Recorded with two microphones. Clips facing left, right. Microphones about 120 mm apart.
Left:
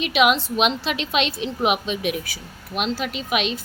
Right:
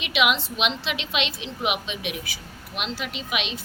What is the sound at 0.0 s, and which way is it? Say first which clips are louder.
A woman's voice: left 5 dB; 40° left (ahead or behind).